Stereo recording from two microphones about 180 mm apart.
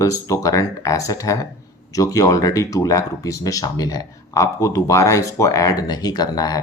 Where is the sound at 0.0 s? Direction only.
20° left (ahead or behind).